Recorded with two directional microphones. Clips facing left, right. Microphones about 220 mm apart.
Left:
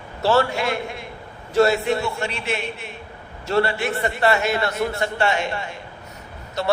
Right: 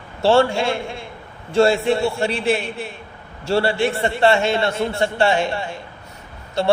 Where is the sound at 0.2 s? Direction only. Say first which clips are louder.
Right 4 dB; 30° right (ahead or behind).